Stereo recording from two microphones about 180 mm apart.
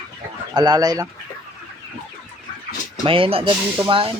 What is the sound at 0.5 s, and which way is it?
Speech, 20° right (ahead or behind).